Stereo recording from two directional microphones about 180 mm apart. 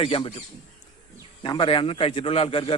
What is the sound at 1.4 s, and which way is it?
Speech, 30° left (ahead or behind).